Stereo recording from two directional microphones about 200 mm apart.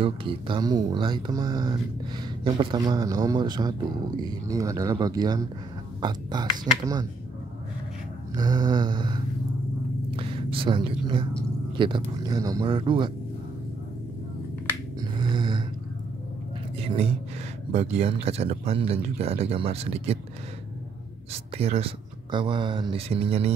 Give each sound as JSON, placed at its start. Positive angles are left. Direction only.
{"t": 0.0, "sound": "speech", "side_deg": -25}
{"t": 8.4, "sound": "speech", "side_deg": -20}
{"t": 15.0, "sound": "finger snapping", "side_deg": -20}
{"t": 16.7, "sound": "a sound", "side_deg": -30}
{"t": 17.7, "sound": "speech", "side_deg": -30}
{"t": 21.3, "sound": "speech", "side_deg": -30}